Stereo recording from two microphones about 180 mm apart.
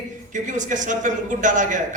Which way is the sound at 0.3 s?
45° right (ahead or behind).